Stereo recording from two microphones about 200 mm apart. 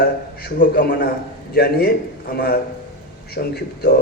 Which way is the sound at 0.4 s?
50° left (ahead or behind).